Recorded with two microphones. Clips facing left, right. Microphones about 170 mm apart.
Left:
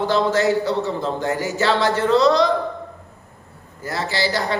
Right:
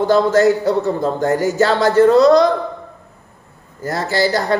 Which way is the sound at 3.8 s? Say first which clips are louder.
Right 6 dB; 45° right (ahead or behind).